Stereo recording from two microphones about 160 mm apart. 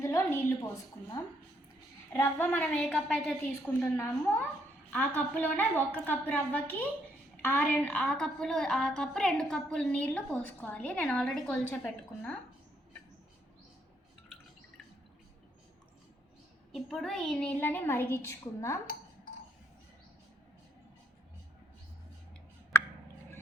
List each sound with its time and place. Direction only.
0.0 s a sound: 20° left (ahead or behind)
1.2 s a woman's voice: 15° left (ahead or behind)
16.7 s a woman's voice: centre (ahead or behind); by 18.8 s 15° left (ahead or behind)